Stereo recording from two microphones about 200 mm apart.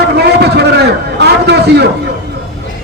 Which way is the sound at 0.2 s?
55° right (ahead or behind).